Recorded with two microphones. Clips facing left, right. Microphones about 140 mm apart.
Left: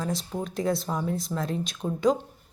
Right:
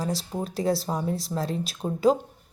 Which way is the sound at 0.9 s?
20° right (ahead or behind).